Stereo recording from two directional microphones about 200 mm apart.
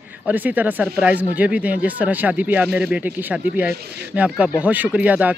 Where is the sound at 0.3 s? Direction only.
10° right (ahead or behind).